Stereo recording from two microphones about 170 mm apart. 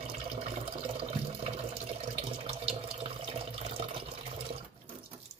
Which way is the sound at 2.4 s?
35° right (ahead or behind).